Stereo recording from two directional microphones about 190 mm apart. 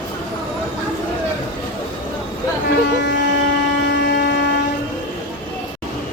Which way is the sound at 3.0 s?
65° left (ahead or behind).